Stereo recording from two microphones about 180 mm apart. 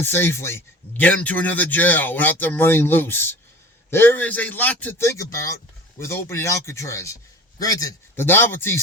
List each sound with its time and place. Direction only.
0.0 s a man's voice: 10° left (ahead or behind)